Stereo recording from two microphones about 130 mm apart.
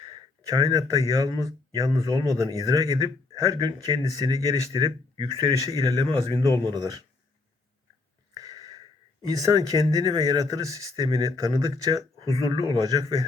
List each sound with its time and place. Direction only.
0.1 s speech: 30° right (ahead or behind)
8.3 s a sound: 25° right (ahead or behind)
9.3 s speech: 30° right (ahead or behind)